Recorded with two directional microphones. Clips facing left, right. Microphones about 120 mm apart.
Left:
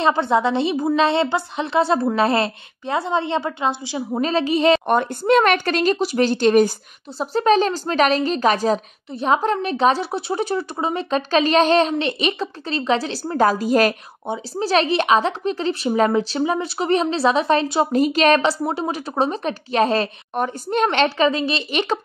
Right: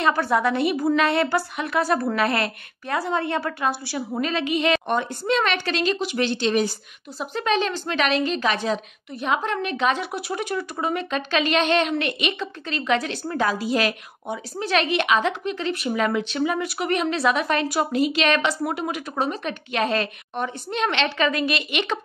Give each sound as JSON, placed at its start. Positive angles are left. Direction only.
{"t": 0.0, "sound": "speech", "side_deg": 25}
{"t": 4.2, "sound": "a woman's voice", "side_deg": 35}
{"t": 4.8, "sound": "speech", "side_deg": 50}
{"t": 7.2, "sound": "a woman's voice", "side_deg": 35}
{"t": 13.3, "sound": "speech", "side_deg": 40}
{"t": 14.2, "sound": "speech", "side_deg": 25}
{"t": 17.9, "sound": "a woman's voice", "side_deg": 40}
{"t": 21.3, "sound": "speech", "side_deg": 30}